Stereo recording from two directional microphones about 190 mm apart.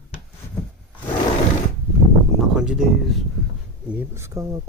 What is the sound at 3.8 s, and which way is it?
Speech, 10° right (ahead or behind).